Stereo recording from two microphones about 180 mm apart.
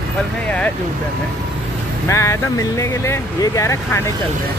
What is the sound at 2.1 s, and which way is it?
Speech, 15° left (ahead or behind).